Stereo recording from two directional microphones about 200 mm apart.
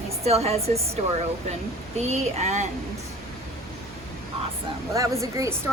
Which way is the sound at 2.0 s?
35° right (ahead or behind).